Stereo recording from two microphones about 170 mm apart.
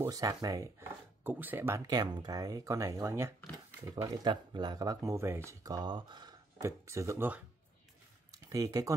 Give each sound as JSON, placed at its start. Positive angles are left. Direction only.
{"t": 0.0, "sound": "speech", "side_deg": -20}
{"t": 8.5, "sound": "speech", "side_deg": -20}